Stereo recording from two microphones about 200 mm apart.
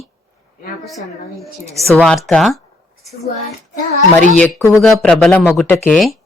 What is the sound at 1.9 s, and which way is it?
Speech, 5° left (ahead or behind).